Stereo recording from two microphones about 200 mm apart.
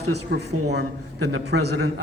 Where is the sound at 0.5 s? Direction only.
90° right.